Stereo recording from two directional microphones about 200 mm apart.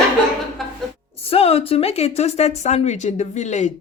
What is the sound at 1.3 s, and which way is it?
Speech, 30° left (ahead or behind).